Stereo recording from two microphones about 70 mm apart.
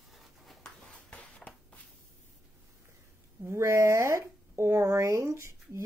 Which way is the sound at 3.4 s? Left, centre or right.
Right.